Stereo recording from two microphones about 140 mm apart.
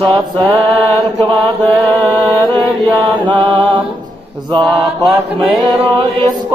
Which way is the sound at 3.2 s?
35° right (ahead or behind).